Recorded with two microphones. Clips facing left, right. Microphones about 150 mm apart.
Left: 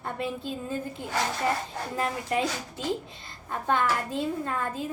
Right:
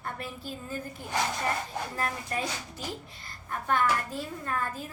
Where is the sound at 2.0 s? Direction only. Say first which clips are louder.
Left 6 dB; 15° left (ahead or behind).